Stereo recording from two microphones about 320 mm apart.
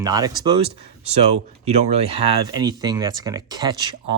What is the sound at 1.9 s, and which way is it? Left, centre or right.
Speech, centre.